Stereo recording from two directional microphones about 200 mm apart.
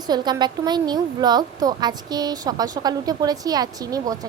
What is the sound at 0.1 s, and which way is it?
A woman's voice, 20° right (ahead or behind).